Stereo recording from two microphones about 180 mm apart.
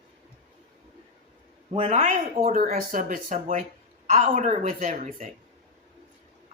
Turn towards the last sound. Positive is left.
turn(degrees=-45)  # may be behind; listen again after turning